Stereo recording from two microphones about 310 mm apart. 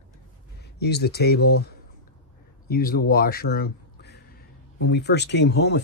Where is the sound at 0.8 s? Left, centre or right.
Left.